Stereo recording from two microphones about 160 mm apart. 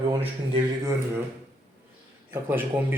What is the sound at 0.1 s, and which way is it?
Speech, 30° right (ahead or behind).